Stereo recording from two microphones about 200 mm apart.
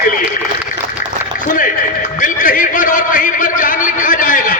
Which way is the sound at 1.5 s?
40° left (ahead or behind).